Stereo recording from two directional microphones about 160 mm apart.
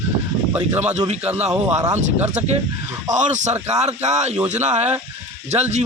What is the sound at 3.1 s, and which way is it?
A man's voice, 50° right (ahead or behind).